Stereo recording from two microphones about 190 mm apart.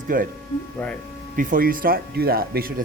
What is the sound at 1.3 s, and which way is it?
Speech, 45° right (ahead or behind).